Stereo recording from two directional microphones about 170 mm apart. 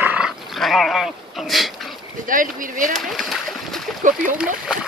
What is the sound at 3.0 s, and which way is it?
Splash, centre (ahead or behind).